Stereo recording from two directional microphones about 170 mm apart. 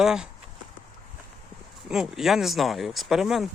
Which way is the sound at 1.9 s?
5° right (ahead or behind).